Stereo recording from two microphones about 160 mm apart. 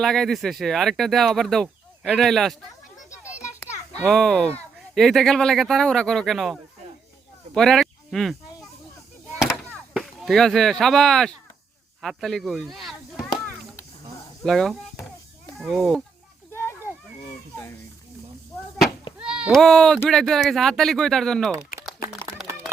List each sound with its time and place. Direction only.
0.0 s speech: centre (ahead or behind)
4.0 s speech: 5° left (ahead or behind)
9.3 s a sound: centre (ahead or behind)
12.0 s chop: centre (ahead or behind)
14.4 s speech: 5° left (ahead or behind)
16.5 s children playing: 15° left (ahead or behind)
19.2 s speech: 5° right (ahead or behind)